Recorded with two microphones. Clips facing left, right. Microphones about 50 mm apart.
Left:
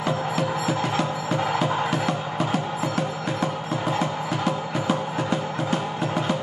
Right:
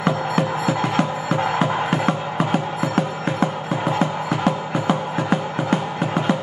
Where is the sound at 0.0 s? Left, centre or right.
Right.